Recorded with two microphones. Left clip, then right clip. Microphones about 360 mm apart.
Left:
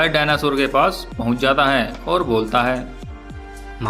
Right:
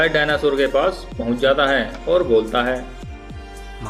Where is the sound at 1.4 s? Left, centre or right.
Left.